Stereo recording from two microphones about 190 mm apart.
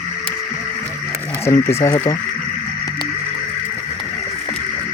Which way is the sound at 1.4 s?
15° left (ahead or behind).